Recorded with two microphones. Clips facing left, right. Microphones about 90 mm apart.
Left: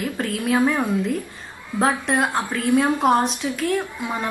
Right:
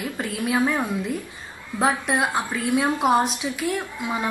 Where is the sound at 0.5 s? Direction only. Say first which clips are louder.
Left 3 dB; 15° left (ahead or behind).